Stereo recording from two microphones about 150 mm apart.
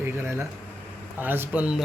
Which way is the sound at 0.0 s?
15° right (ahead or behind).